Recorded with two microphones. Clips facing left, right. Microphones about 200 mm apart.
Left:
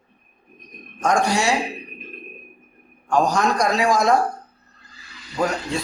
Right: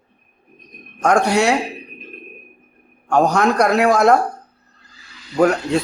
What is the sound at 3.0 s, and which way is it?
Speech, 60° right (ahead or behind).